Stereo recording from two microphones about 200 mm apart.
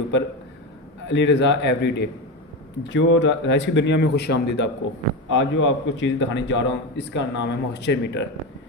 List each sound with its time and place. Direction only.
1.0 s a man's voice: 60° left (ahead or behind)
5.3 s a man's voice: 70° left (ahead or behind)